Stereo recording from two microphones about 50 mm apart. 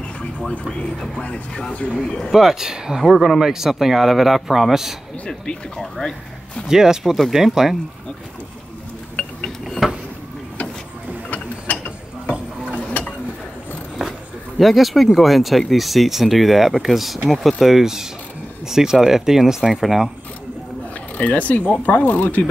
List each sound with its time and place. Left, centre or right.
0.5 s speech: left
2.3 s speech: centre
5.8 s speech: centre
6.7 s speech: centre
9.1 s mechanisms: centre
11.2 s mechanisms: left
12.8 s stir: left
14.6 s speech: centre
21.2 s speech: left